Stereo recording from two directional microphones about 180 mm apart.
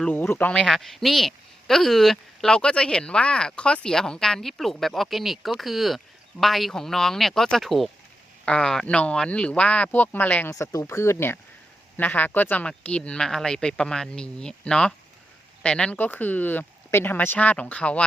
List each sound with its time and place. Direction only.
0.0 s speech: 10° left (ahead or behind)